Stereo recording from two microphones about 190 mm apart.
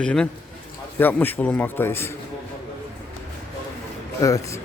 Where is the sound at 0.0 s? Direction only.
5° left (ahead or behind).